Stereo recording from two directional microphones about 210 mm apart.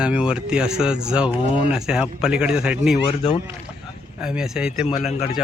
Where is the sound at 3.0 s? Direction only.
25° left (ahead or behind).